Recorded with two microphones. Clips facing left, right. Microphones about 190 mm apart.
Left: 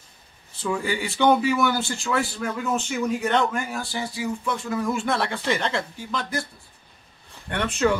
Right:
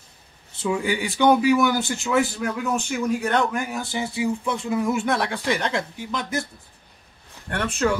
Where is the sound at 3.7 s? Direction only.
20° right (ahead or behind).